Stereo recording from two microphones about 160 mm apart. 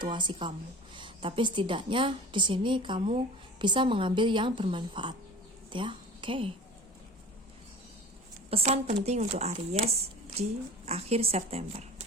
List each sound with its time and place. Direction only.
0.0 s a woman's voice: 30° right (ahead or behind)
8.4 s a woman's voice: 40° right (ahead or behind)